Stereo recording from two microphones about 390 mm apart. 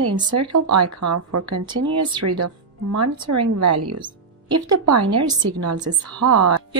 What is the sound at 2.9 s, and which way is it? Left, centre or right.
A woman's voice, right.